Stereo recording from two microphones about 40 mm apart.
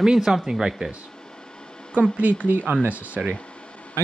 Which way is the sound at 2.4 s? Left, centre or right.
Right.